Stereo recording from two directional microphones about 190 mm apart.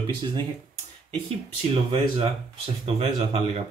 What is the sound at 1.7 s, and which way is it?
Speech, 30° right (ahead or behind).